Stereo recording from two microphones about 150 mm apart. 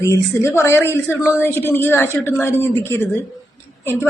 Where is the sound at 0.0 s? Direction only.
20° left (ahead or behind).